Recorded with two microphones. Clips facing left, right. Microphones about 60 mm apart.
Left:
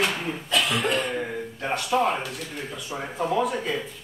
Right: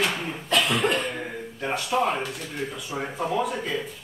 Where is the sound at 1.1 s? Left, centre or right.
Centre.